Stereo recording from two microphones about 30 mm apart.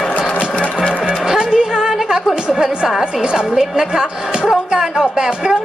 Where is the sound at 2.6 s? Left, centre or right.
Right.